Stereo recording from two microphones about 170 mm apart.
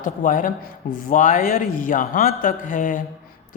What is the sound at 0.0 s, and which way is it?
A man's voice, 50° left (ahead or behind).